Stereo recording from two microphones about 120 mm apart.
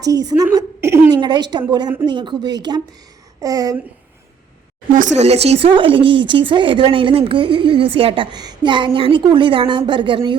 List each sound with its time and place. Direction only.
0.0 s a woman's voice: 30° right (ahead or behind)
1.1 s speech: 35° right (ahead or behind)
4.9 s speech: 80° right; by 10.3 s 40° right (ahead or behind)